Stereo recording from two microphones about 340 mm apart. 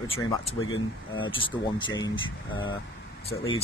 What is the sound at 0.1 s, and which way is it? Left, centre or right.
Speech, centre.